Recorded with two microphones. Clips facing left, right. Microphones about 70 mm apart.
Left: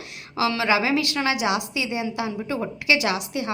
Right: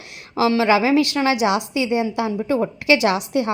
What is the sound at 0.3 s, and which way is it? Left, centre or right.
A woman's voice, right.